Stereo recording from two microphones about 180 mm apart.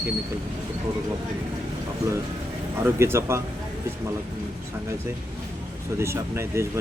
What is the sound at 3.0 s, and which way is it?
Speech, 15° right (ahead or behind).